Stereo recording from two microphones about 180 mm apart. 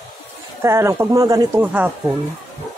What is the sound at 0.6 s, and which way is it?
Speech, 15° right (ahead or behind).